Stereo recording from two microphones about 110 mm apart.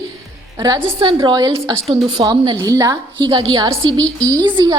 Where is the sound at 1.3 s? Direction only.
35° right (ahead or behind).